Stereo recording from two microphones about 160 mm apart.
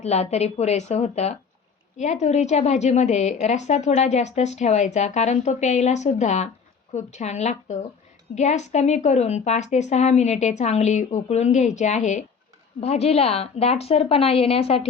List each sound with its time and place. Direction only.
0.0 s a woman's voice: 45° left (ahead or behind)